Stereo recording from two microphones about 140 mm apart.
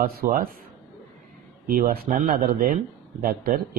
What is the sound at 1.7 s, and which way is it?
Speech, 85° right.